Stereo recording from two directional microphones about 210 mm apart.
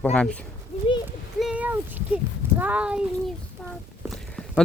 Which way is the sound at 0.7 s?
30° left (ahead or behind).